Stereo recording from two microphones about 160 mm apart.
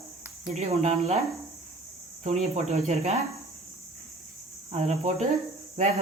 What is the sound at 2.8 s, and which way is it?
Cricket, 50° right (ahead or behind).